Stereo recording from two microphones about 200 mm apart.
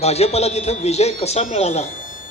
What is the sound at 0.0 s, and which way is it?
Speech, 30° left (ahead or behind).